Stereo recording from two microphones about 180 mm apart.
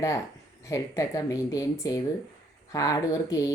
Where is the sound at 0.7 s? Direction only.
20° left (ahead or behind).